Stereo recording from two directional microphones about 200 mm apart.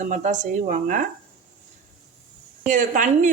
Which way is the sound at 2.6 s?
40° right (ahead or behind).